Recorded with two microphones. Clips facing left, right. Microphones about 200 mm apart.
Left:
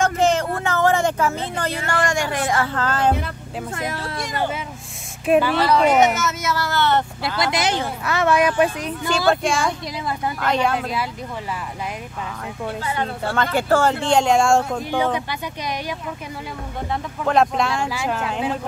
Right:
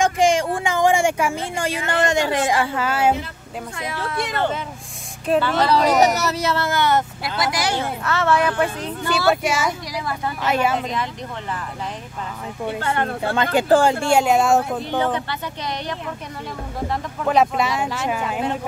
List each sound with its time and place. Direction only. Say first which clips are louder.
0.0 s speech: right 1 dB; 15° right (ahead or behind)
5.2 s speech: left 2 dB; 15° left (ahead or behind)
5.7 s speech: even; 35° right (ahead or behind); by 7.4 s 15° right (ahead or behind)
7.4 s speech: even; 20° left (ahead or behind)
9.3 s speech: left 1 dB; 5° right (ahead or behind)
10.8 s speech: even; 5° left (ahead or behind)
12.8 s speech: right 3 dB; 60° right (ahead or behind)
13.2 s speech: right 1 dB; 15° right (ahead or behind)
14.8 s speech: even; 10° left (ahead or behind)
16.8 s speech: right 1 dB; centre (ahead or behind)